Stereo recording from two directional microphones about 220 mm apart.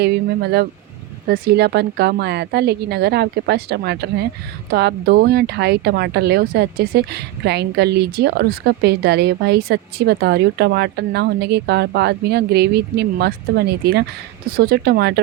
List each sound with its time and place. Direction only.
0.0 s speech: 45° right (ahead or behind)